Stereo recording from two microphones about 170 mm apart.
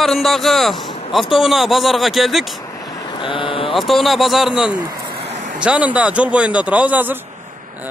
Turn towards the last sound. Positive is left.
turn(degrees=-10)  # may be behind; listen again after turning